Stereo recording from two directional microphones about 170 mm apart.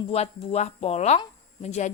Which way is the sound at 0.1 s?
40° left (ahead or behind).